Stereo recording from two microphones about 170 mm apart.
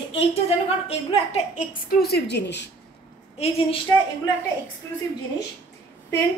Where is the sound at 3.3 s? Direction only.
35° left (ahead or behind).